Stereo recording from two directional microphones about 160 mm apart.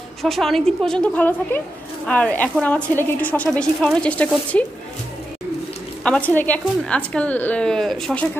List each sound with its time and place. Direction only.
0.2 s a woman's voice: centre (ahead or behind)
6.0 s a woman's voice: 10° left (ahead or behind)